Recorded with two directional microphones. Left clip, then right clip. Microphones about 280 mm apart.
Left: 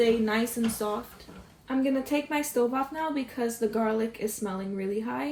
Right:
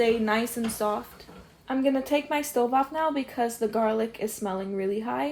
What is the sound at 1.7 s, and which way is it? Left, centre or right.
Speech, right.